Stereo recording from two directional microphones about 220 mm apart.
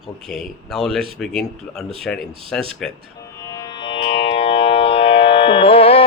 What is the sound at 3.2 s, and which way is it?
Music, 15° left (ahead or behind).